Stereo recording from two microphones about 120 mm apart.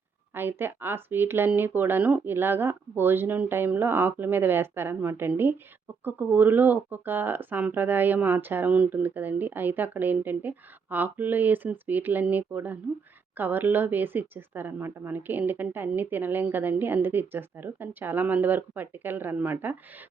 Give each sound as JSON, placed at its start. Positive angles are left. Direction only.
{"t": 0.3, "sound": "speech", "side_deg": -15}